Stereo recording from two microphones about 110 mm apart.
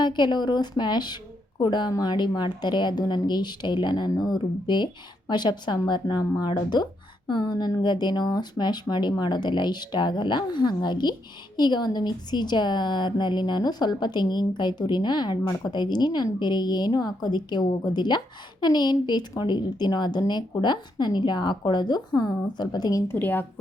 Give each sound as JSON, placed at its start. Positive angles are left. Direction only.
{"t": 0.0, "sound": "a woman's voice", "side_deg": 40}
{"t": 23.0, "sound": "speech", "side_deg": 20}